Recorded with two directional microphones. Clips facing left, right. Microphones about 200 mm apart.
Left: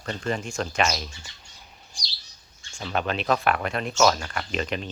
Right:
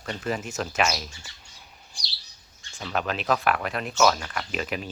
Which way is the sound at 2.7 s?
Centre (ahead or behind).